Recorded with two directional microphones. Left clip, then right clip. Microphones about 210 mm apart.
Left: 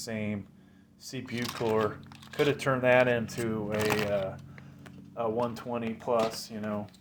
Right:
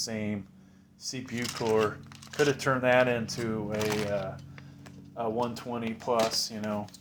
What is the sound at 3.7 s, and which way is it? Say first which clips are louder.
Speech: left 2 dB; 35° left (ahead or behind).